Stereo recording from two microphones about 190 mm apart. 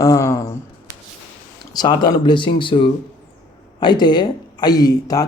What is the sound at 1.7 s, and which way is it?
Speech, 25° left (ahead or behind).